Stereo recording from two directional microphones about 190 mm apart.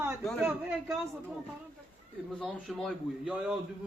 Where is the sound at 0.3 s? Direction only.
10° right (ahead or behind).